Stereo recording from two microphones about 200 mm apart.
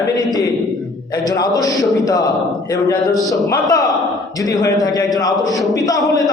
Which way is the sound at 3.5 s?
20° left (ahead or behind).